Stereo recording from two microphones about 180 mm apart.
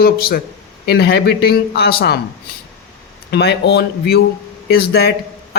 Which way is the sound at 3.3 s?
65° left (ahead or behind).